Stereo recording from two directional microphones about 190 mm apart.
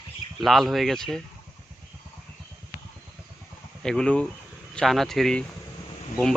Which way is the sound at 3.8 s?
5° left (ahead or behind).